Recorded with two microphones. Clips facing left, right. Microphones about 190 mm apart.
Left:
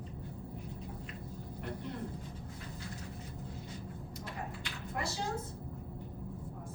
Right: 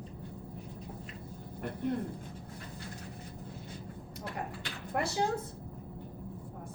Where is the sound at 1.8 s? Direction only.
55° right (ahead or behind).